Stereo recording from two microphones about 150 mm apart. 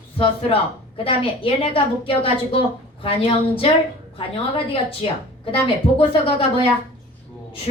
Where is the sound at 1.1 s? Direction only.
35° left (ahead or behind).